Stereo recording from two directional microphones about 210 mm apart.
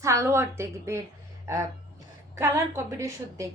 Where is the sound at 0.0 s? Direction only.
15° right (ahead or behind).